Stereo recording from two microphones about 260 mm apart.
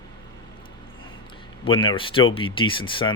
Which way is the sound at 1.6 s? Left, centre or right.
Centre.